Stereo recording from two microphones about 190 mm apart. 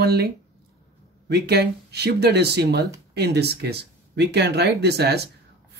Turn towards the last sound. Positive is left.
turn(degrees=-60)  # may be behind; listen again after turning